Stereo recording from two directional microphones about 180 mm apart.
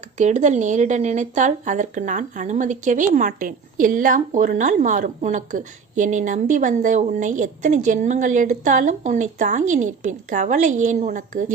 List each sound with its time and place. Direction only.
0.2 s speech: 40° right (ahead or behind)